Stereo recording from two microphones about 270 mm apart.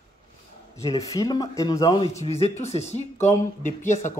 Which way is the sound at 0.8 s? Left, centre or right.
Centre.